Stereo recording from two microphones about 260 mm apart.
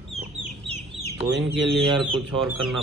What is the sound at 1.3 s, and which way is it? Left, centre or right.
Speech, right.